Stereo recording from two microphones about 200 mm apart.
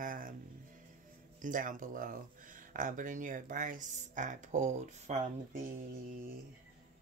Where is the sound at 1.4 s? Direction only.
40° right (ahead or behind).